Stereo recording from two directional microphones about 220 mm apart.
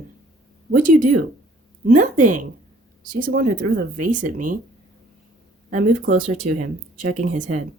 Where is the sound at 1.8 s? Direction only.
35° right (ahead or behind).